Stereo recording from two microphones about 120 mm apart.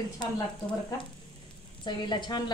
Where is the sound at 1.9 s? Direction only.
40° left (ahead or behind).